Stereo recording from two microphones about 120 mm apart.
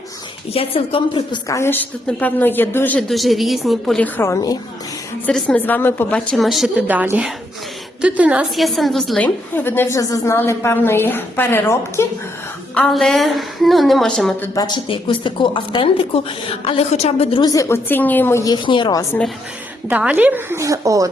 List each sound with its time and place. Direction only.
0.5 s a woman's voice: 55° left (ahead or behind)
1.5 s a woman's voice: 20° left (ahead or behind)
3.1 s a woman's voice: centre (ahead or behind)
4.0 s a woman's voice: 20° left (ahead or behind)
5.2 s a woman's voice: 10° left (ahead or behind)
6.1 s a woman's voice: centre (ahead or behind)
6.8 s a woman's voice: 15° right (ahead or behind)
8.5 s a woman's voice: centre (ahead or behind); by 12.0 s 20° left (ahead or behind)
12.7 s a woman's voice: 5° left (ahead or behind)
14.8 s a woman's voice: 45° left (ahead or behind)
17.4 s a woman's voice: 30° left (ahead or behind)
18.4 s a woman's voice: 40° left (ahead or behind)
19.9 s a woman's voice: 10° right (ahead or behind); by 21.1 s 30° right (ahead or behind)